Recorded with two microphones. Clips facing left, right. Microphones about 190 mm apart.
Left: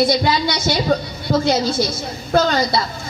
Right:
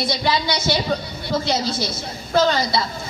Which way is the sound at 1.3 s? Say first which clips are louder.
Left 5 dB; 50° left (ahead or behind).